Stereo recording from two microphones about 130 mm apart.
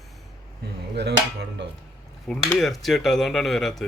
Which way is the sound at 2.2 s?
Centre (ahead or behind).